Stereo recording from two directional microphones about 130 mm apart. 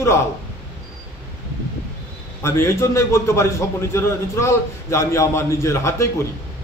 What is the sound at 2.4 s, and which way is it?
A man's voice, 20° left (ahead or behind).